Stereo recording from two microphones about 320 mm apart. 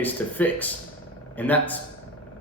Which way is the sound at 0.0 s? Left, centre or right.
Centre.